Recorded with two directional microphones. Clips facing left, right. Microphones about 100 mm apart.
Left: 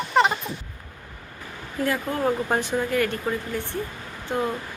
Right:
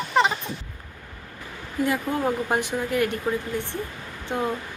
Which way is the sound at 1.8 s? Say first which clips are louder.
Right 1 dB; 15° right (ahead or behind).